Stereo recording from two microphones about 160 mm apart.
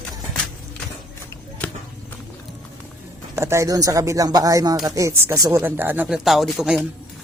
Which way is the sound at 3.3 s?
15° right (ahead or behind).